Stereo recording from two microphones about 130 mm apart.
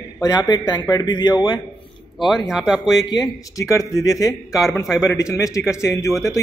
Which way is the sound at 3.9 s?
5° right (ahead or behind).